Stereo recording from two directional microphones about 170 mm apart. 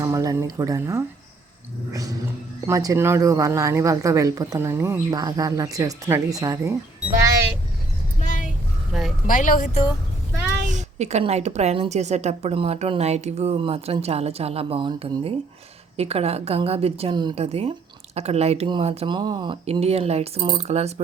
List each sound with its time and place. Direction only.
0.0 s a sound: 20° right (ahead or behind)
1.9 s speech: 20° right (ahead or behind)
8.2 s a sound: 50° left (ahead or behind)
8.9 s speech: centre (ahead or behind)
9.2 s a woman's voice: 50° left (ahead or behind)
10.7 s a woman's voice: 45° right (ahead or behind)